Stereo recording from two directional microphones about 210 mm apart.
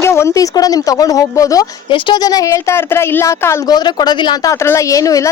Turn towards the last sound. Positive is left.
turn(degrees=15)  # may be behind; listen again after turning